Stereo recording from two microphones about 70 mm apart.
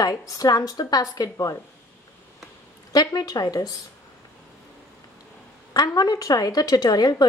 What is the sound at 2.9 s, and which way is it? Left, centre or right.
Speech, left.